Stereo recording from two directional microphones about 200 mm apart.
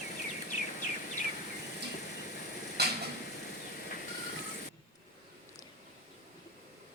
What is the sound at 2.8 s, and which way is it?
Mechanisms, 55° right (ahead or behind).